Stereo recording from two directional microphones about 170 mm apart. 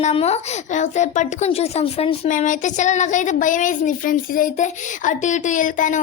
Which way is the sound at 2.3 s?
50° left (ahead or behind).